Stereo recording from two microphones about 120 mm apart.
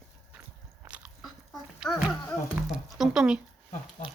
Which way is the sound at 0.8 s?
10° right (ahead or behind).